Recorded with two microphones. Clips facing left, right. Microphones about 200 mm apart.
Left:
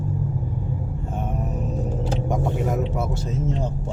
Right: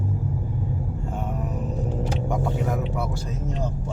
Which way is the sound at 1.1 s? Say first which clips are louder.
Left 2 dB; 20° left (ahead or behind).